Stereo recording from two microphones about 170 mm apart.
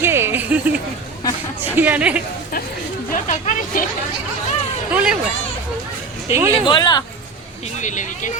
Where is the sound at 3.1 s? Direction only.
50° left (ahead or behind).